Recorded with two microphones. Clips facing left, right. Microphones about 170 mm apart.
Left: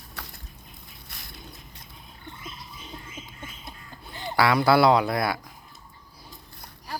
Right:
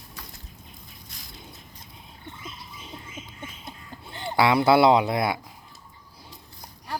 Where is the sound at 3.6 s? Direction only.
25° right (ahead or behind).